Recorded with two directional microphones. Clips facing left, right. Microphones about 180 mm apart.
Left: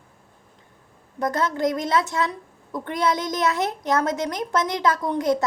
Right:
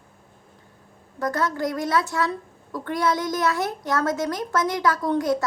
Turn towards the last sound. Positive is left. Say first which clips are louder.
# even
turn(degrees=20)  # may be behind; listen again after turning